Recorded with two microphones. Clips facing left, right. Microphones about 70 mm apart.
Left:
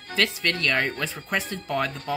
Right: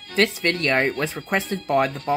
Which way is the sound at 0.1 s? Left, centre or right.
Right.